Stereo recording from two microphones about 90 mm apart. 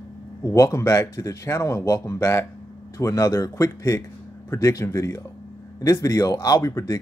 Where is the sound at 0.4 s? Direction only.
35° left (ahead or behind).